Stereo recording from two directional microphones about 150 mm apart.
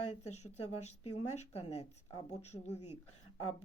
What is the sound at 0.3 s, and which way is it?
Speech, 45° left (ahead or behind).